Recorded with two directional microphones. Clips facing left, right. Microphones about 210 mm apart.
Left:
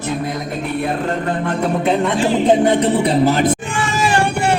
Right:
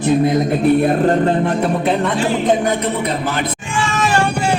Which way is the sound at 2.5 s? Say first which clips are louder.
Left 3 dB; 30° left (ahead or behind).